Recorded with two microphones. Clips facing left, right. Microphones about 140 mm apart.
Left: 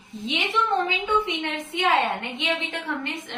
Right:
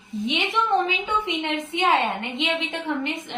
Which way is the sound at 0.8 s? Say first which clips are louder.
Left 1 dB; 15° right (ahead or behind).